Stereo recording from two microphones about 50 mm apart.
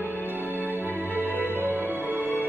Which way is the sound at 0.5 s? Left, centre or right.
Right.